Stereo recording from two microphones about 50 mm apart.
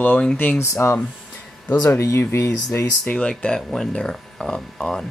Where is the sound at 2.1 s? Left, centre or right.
Left.